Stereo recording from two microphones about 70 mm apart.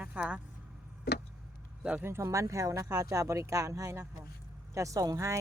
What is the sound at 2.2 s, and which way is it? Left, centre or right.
Speech, right.